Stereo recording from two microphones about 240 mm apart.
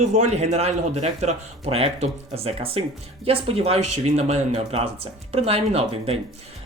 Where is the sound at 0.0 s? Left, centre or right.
Right.